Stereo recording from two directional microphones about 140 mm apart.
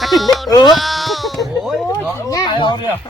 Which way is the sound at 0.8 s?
Centre (ahead or behind).